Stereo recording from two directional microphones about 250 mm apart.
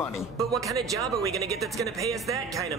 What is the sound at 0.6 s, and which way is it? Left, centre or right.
Speech, centre.